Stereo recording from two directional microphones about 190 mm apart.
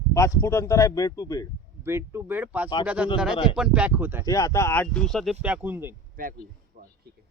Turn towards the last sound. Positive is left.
turn(degrees=-45)  # may be behind; listen again after turning